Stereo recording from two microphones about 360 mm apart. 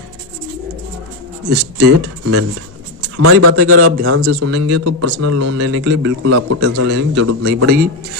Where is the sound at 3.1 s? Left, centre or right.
Right.